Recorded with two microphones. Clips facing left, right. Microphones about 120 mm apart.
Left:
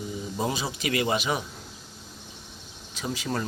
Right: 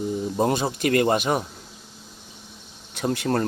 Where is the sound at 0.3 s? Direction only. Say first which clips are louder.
Right 6 dB; 55° right (ahead or behind).